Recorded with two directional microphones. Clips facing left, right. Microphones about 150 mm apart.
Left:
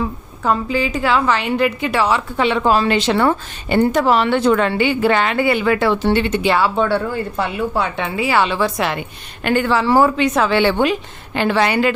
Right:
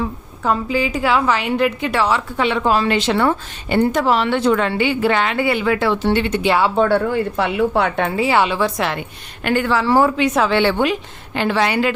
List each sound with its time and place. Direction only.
0.0 s a woman's voice: 5° right (ahead or behind)
2.4 s a woman's voice: 30° left (ahead or behind)
6.7 s speech: 45° right (ahead or behind)
7.0 s speech: 75° right (ahead or behind); by 8.2 s 50° right (ahead or behind)
8.2 s a woman's voice: 25° right (ahead or behind)
8.4 s a woman's voice: centre (ahead or behind)
8.8 s a woman's voice: 15° left (ahead or behind)
9.4 s speech: 30° left (ahead or behind)
10.0 s a woman's voice: centre (ahead or behind)
11.3 s a woman's voice: 55° left (ahead or behind)